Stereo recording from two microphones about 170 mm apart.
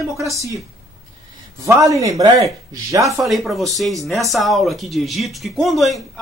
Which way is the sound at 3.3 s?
Centre (ahead or behind).